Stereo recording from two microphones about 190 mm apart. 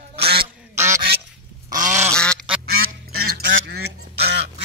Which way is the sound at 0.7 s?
15° right (ahead or behind).